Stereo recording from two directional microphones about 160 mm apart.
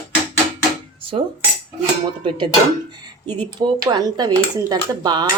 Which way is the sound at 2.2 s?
30° right (ahead or behind).